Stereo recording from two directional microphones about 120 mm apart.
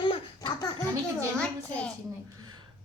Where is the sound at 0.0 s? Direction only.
40° left (ahead or behind).